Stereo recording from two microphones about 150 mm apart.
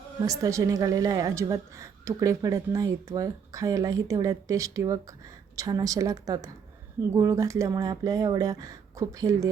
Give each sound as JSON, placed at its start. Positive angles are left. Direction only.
{"t": 0.2, "sound": "a woman's voice", "side_deg": -25}